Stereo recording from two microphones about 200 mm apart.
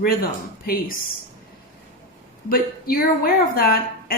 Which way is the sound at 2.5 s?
45° left (ahead or behind).